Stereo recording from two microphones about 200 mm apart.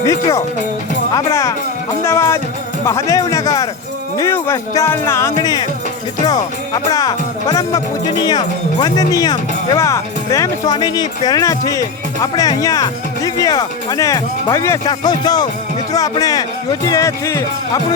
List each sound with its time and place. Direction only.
0.0 s speech: 15° left (ahead or behind)
6.9 s speech: 20° left (ahead or behind)